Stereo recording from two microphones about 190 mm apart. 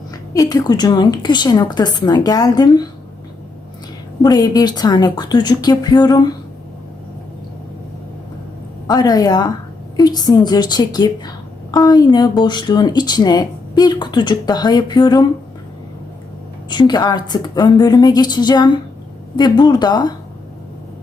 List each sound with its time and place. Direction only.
0.1 s a woman's voice: 20° left (ahead or behind)
4.2 s a woman's voice: 20° left (ahead or behind)
8.9 s a woman's voice: 20° left (ahead or behind)
16.6 s a woman's voice: 25° left (ahead or behind)